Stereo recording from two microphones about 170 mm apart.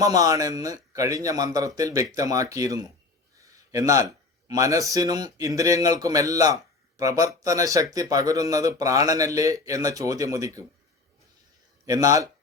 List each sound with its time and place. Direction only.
0.0 s a man's voice: 20° right (ahead or behind)
11.9 s a man's voice: 20° right (ahead or behind)